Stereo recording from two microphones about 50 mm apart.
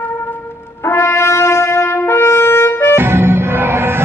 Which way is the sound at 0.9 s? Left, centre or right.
Left.